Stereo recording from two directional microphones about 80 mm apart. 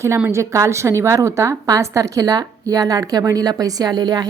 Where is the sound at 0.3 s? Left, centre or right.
Right.